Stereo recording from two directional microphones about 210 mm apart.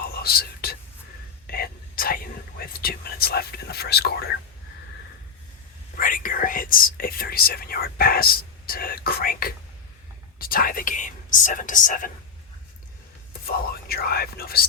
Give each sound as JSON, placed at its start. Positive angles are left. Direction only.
{"t": 0.0, "sound": "whispering", "side_deg": 45}
{"t": 6.0, "sound": "speech", "side_deg": 40}
{"t": 13.4, "sound": "speech", "side_deg": 45}